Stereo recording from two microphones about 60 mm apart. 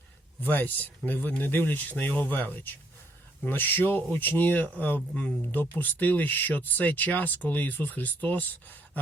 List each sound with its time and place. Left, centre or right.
0.4 s speech: left